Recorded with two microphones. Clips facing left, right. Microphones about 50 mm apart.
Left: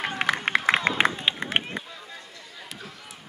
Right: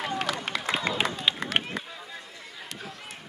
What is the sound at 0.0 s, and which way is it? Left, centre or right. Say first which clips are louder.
Run: left 4 dB; left.